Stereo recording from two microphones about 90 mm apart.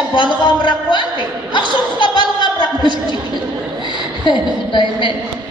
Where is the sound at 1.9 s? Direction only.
60° left (ahead or behind).